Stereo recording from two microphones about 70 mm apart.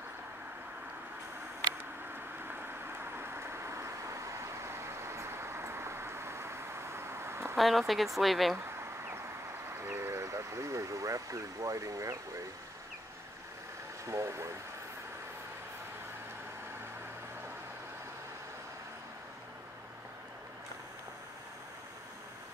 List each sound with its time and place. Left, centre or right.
3.2 s vehicle: right
7.5 s speech: centre
9.8 s vehicle: right
14.0 s speech: right